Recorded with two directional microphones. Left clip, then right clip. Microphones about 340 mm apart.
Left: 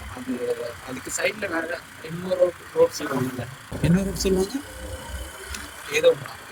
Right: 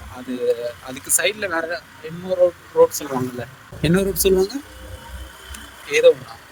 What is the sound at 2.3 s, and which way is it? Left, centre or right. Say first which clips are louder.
Speech: right 4 dB; right.